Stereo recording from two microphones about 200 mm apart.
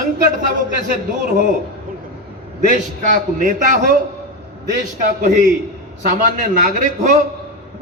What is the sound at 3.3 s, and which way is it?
Speech, 40° right (ahead or behind).